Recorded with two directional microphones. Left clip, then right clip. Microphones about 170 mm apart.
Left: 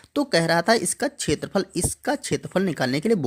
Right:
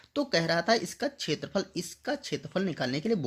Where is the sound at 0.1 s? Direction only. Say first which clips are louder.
Left 7 dB; 35° left (ahead or behind).